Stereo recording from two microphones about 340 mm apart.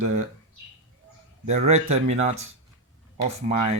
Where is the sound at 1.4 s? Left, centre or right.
Centre.